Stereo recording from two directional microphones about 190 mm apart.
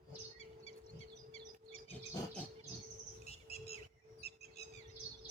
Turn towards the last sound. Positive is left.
turn(degrees=35)  # may be behind; listen again after turning